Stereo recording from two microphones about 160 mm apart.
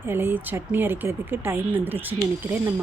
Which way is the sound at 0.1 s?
15° right (ahead or behind).